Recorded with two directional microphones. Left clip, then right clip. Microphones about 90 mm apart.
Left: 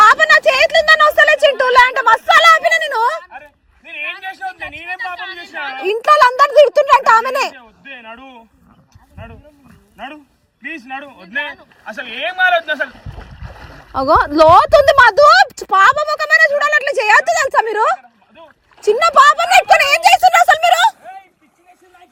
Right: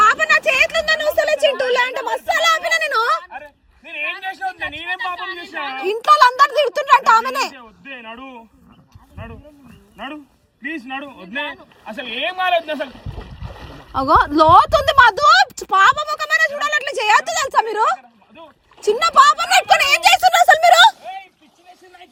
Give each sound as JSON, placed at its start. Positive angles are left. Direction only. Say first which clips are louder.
{"t": 0.0, "sound": "a sound", "louder": "left 5 dB", "side_deg": -20}
{"t": 9.1, "sound": "wild animals", "louder": "even", "side_deg": -40}
{"t": 10.6, "sound": "speech", "louder": "even", "side_deg": -30}